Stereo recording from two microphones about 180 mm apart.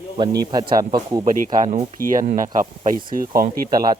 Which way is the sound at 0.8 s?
20° right (ahead or behind).